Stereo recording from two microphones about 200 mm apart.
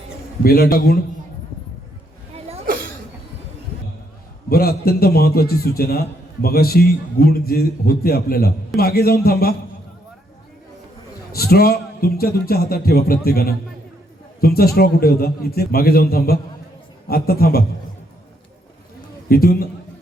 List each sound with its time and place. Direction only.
0.4 s a man's voice: 50° left (ahead or behind)
4.4 s a man's voice: 50° left (ahead or behind)
11.3 s a man's voice: 50° left (ahead or behind)
19.3 s a man's voice: 50° left (ahead or behind)